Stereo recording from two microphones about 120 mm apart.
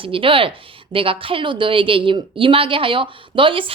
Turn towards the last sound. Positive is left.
turn(degrees=-45)  # may be behind; listen again after turning